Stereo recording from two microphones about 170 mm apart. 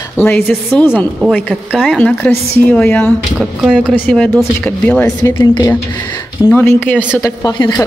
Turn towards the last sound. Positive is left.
turn(degrees=25)  # may be behind; listen again after turning